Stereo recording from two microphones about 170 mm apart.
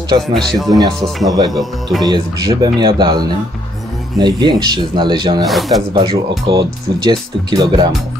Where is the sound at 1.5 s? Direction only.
Centre (ahead or behind).